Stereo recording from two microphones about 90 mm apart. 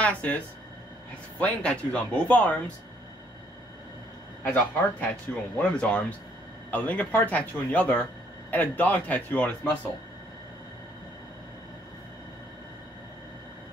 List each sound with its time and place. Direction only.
0.0 s speech: 15° left (ahead or behind)
1.4 s speech: 15° left (ahead or behind)
4.5 s speech: 15° left (ahead or behind)